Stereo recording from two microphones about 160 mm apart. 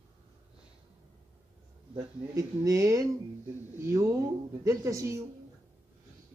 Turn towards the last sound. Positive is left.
turn(degrees=-20)  # may be behind; listen again after turning